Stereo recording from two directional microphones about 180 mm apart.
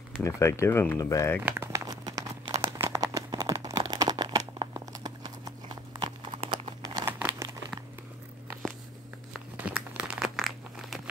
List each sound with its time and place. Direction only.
0.2 s speech: 15° left (ahead or behind)
1.4 s crumpling: 15° right (ahead or behind)
2.6 s a sound: 15° right (ahead or behind)
5.9 s clip-clop: 30° right (ahead or behind)
6.8 s crumpling: 20° right (ahead or behind)
9.3 s crumpling: 5° right (ahead or behind)